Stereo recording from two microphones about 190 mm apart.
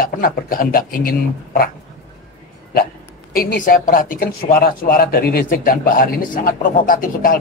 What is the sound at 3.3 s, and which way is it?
Speech, 50° left (ahead or behind).